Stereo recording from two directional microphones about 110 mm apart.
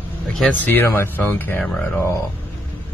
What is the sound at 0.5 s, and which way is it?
Speech, 20° left (ahead or behind).